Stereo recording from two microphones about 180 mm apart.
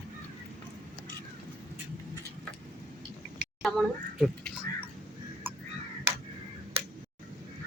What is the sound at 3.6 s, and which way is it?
Speech, centre (ahead or behind).